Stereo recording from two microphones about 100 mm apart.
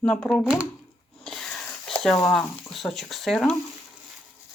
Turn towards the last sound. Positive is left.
turn(degrees=5)  # may be behind; listen again after turning